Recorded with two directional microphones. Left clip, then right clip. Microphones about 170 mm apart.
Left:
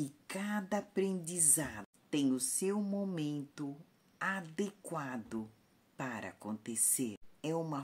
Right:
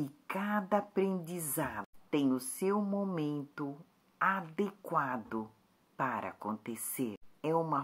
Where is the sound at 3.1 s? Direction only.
20° left (ahead or behind).